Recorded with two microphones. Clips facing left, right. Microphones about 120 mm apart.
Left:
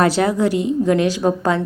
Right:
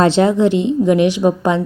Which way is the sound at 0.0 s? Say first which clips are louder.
Right 4 dB; 25° right (ahead or behind).